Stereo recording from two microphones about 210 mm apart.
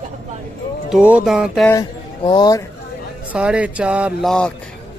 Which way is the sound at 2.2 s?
20° left (ahead or behind).